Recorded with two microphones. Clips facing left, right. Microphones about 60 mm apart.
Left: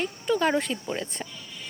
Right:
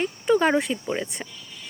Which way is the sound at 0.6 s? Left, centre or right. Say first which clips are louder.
Right 3 dB; centre.